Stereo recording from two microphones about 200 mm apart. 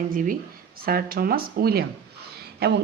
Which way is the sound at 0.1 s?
45° right (ahead or behind).